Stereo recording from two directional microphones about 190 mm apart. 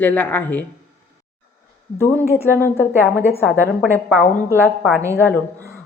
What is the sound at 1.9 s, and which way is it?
Speech, 15° left (ahead or behind).